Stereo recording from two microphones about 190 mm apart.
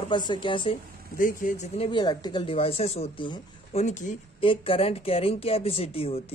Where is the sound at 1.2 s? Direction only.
45° left (ahead or behind).